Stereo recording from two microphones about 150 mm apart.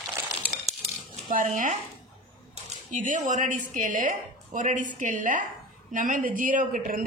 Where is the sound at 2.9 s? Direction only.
55° right (ahead or behind).